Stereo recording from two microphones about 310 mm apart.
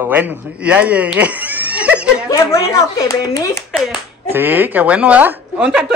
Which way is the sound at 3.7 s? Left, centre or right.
Centre.